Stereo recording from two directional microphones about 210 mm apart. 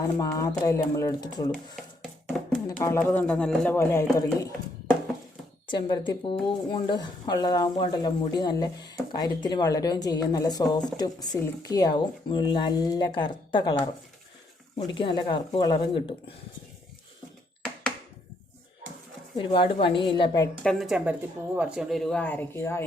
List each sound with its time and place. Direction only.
0.2 s speech: 15° left (ahead or behind)
2.3 s music: 5° left (ahead or behind)
2.6 s speech: 15° left (ahead or behind)
5.6 s speech: 20° left (ahead or behind)
14.8 s speech: 20° left (ahead or behind)
19.4 s speech: 25° left (ahead or behind)
20.7 s speech: centre (ahead or behind)